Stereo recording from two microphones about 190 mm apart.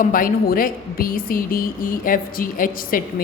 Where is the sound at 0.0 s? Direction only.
45° left (ahead or behind).